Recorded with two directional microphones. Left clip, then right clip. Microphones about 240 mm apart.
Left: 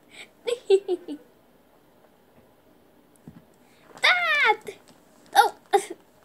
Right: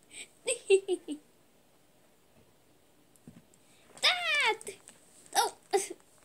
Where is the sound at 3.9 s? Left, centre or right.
Right.